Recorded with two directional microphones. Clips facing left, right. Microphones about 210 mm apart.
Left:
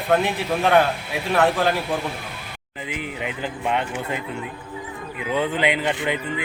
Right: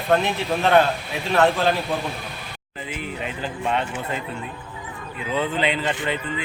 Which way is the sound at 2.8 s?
15° left (ahead or behind).